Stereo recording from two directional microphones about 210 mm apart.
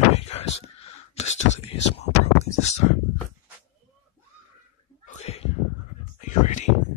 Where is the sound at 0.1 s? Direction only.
30° left (ahead or behind).